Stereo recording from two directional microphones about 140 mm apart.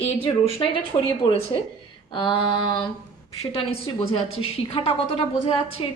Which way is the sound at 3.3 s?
45° left (ahead or behind).